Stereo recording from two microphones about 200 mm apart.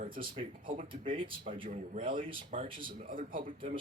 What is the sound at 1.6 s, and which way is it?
Speech, 35° right (ahead or behind).